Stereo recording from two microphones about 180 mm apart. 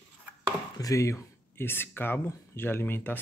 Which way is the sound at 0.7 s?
20° left (ahead or behind).